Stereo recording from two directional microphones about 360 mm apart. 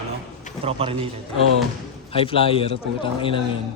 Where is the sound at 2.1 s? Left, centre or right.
Centre.